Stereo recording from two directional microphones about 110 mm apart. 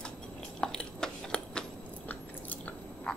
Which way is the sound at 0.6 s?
5° left (ahead or behind).